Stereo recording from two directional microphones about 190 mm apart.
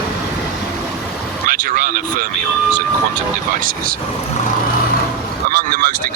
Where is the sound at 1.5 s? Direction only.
45° right (ahead or behind).